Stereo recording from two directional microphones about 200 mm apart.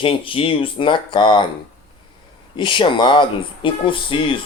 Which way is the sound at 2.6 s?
25° left (ahead or behind).